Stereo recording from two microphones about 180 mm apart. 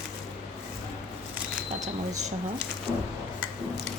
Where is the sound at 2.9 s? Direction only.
Centre (ahead or behind).